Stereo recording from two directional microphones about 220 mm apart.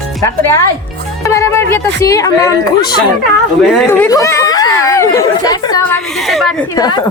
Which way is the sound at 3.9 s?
15° left (ahead or behind).